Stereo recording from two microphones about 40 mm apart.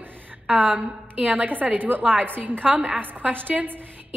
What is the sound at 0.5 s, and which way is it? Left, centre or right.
A woman's voice, right.